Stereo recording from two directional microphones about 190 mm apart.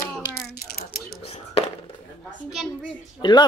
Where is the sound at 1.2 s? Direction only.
35° left (ahead or behind).